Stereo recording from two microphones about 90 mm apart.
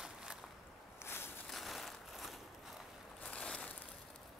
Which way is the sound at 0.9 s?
25° left (ahead or behind).